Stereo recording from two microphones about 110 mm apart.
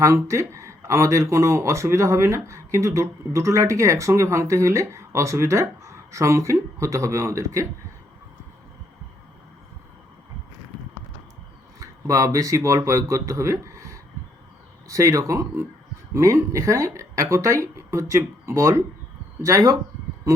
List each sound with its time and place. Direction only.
0.0 s speech: 25° right (ahead or behind)
11.8 s speech: 30° right (ahead or behind)